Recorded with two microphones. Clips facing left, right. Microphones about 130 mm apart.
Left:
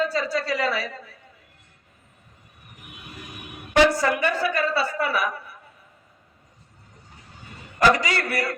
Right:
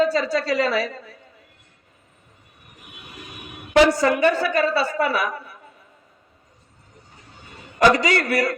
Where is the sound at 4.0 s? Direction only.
25° right (ahead or behind).